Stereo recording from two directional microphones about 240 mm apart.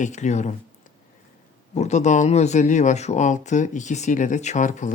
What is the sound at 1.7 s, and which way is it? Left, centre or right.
Speech, left.